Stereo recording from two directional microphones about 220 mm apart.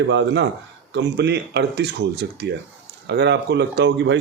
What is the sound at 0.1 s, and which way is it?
A man's voice, 55° right (ahead or behind).